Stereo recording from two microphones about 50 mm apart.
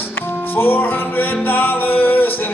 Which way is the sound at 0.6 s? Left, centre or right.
Left.